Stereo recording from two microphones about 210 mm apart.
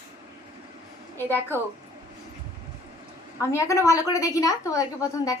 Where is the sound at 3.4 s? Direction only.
15° left (ahead or behind).